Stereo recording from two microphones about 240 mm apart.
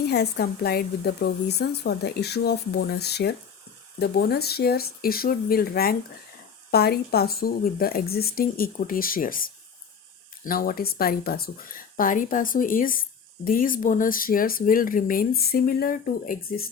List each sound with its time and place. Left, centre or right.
0.0 s a woman's voice: left